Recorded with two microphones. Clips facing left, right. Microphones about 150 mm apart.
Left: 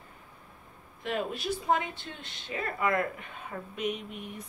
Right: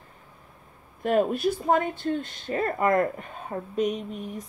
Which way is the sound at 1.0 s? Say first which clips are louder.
Right 9 dB; 45° right (ahead or behind).